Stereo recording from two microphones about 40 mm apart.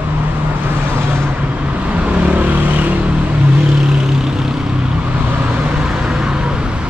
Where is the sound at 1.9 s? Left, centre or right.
Right.